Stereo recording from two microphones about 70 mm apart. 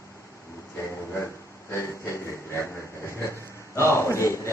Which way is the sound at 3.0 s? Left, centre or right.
Left.